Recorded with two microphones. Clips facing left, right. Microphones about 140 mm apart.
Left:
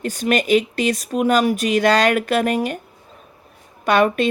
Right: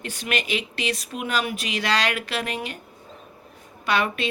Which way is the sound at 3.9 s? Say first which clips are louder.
Left 8 dB; 50° left (ahead or behind).